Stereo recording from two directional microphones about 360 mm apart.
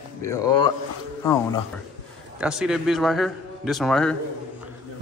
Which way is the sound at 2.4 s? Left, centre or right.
Centre.